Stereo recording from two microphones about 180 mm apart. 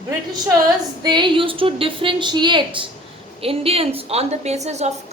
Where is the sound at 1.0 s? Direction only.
25° right (ahead or behind).